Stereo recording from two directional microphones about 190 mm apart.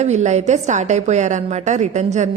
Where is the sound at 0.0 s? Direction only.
40° right (ahead or behind).